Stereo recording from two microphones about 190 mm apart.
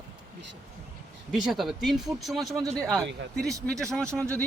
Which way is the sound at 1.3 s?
Centre (ahead or behind).